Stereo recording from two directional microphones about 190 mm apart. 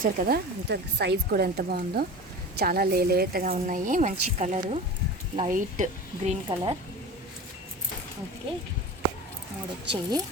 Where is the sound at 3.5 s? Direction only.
35° right (ahead or behind).